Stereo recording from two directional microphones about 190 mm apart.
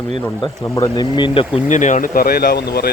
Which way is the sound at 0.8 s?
25° left (ahead or behind).